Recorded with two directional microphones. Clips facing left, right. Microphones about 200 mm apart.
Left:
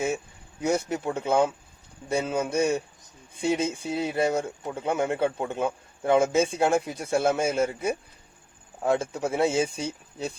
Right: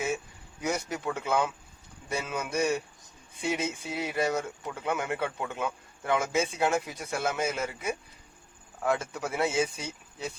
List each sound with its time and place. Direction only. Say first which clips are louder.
0.6 s speech: left 5 dB; 25° left (ahead or behind)